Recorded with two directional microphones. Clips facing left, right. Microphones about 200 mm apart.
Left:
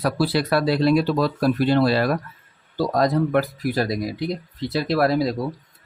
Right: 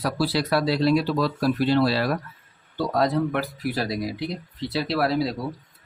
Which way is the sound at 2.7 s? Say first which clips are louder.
Left 2 dB; 40° left (ahead or behind).